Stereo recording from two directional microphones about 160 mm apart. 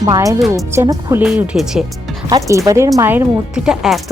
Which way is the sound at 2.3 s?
20° right (ahead or behind).